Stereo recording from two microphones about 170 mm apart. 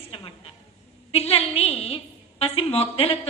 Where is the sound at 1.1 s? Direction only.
35° left (ahead or behind).